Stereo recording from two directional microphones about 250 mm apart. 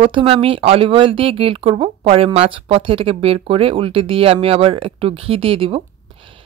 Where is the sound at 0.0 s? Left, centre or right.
Right.